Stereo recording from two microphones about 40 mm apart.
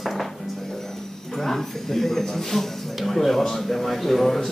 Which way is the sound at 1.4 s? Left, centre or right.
Centre.